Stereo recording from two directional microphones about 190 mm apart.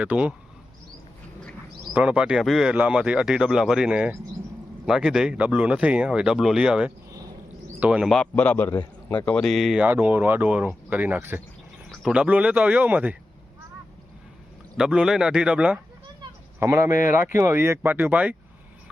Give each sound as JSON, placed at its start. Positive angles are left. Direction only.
{"t": 0.0, "sound": "speech", "side_deg": -5}
{"t": 1.9, "sound": "speech", "side_deg": -5}
{"t": 14.8, "sound": "speech", "side_deg": -5}